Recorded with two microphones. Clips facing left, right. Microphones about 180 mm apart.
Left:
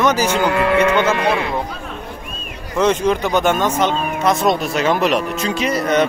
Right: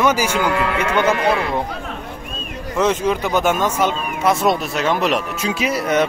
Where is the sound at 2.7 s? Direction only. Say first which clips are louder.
Left 2 dB; 5° right (ahead or behind).